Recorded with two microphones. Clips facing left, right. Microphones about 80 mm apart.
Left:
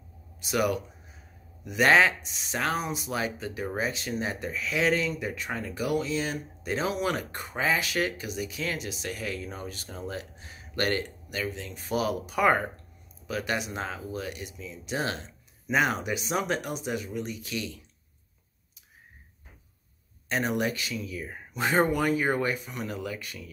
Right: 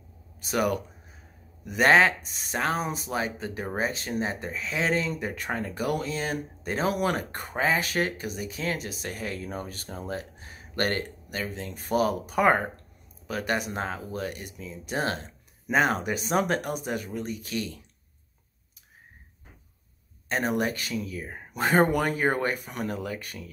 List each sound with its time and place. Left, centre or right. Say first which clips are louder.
0.4 s speech: right 1 dB; right
20.2 s speech: right 1 dB; right
22.8 s speech: right 3 dB; right